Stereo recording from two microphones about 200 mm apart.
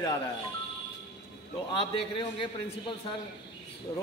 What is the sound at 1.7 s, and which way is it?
A man's voice, 25° left (ahead or behind).